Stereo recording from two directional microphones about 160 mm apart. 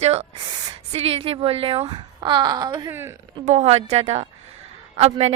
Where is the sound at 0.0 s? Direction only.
40° right (ahead or behind); by 2.9 s 25° right (ahead or behind).